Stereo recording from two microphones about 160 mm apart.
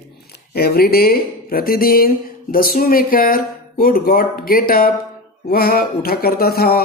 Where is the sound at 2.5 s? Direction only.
65° left (ahead or behind).